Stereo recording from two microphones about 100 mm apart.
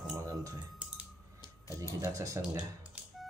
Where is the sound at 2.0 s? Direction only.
35° right (ahead or behind).